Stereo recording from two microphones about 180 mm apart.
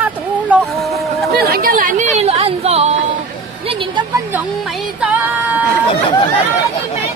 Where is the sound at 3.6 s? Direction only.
30° right (ahead or behind).